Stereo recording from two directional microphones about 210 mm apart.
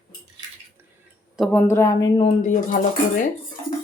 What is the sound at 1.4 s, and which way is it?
Speech, 5° left (ahead or behind).